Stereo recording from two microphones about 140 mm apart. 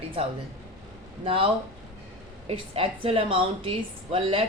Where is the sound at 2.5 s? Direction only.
40° right (ahead or behind).